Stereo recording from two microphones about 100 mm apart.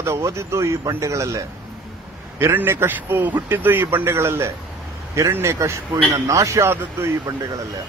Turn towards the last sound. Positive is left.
turn(degrees=-25)  # may be behind; listen again after turning